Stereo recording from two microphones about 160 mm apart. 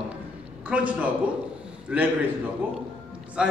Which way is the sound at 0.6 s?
10° right (ahead or behind).